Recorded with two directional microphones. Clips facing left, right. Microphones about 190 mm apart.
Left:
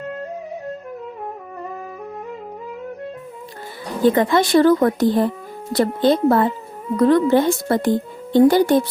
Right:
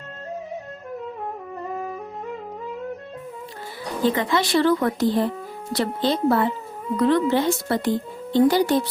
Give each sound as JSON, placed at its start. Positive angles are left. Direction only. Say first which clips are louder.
{"t": 4.0, "sound": "speech", "louder": "left 6 dB", "side_deg": 50}